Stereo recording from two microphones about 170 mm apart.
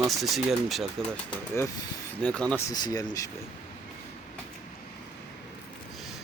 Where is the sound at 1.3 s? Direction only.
15° left (ahead or behind).